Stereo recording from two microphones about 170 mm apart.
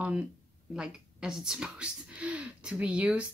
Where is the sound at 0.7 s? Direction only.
5° right (ahead or behind).